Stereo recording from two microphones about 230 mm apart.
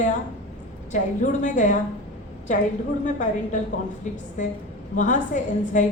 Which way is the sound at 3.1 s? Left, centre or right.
Left.